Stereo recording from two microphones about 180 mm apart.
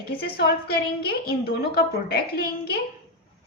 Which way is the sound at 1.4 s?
60° left (ahead or behind).